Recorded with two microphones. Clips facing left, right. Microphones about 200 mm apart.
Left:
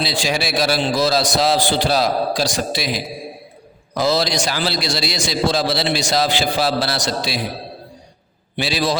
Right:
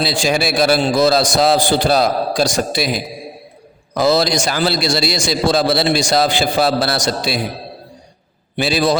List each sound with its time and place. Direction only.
0.0 s a man's voice: 50° right (ahead or behind)
4.0 s a man's voice: 50° right (ahead or behind)
8.5 s a man's voice: 50° right (ahead or behind)